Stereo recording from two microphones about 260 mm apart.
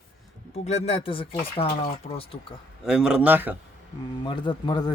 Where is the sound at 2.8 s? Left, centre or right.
Centre.